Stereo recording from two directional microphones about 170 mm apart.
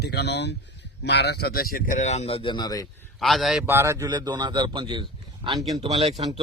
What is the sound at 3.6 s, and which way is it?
A man's voice, 15° right (ahead or behind).